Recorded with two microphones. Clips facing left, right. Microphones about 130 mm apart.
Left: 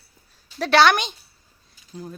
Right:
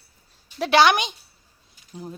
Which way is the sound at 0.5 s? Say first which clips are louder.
Even; 15° right (ahead or behind).